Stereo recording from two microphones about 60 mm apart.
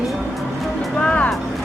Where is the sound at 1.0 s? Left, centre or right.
Centre.